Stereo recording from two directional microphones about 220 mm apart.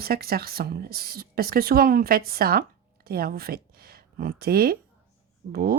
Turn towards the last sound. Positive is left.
turn(degrees=-45)  # may be behind; listen again after turning